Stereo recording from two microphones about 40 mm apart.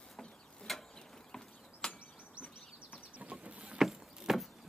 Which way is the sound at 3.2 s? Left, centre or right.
Right.